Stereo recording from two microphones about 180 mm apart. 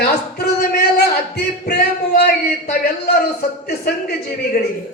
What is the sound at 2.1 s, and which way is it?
A man's voice, 60° left (ahead or behind).